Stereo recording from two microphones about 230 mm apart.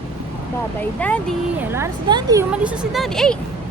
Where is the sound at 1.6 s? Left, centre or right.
Centre.